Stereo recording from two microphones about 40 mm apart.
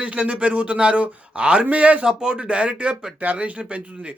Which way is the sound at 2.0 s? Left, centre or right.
Right.